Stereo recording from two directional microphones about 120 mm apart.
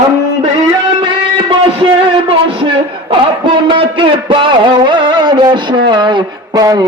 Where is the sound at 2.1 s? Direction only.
45° right (ahead or behind).